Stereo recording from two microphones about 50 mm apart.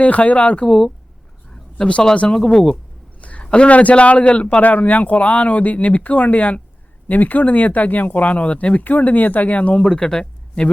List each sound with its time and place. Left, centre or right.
0.0 s a man's voice: left
0.6 s speech: centre
3.2 s a man's voice: left